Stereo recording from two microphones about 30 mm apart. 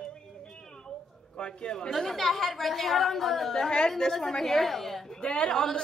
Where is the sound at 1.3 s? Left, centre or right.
Left.